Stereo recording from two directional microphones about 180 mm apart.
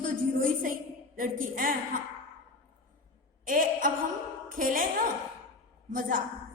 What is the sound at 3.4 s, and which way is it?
A woman's voice, 50° right (ahead or behind).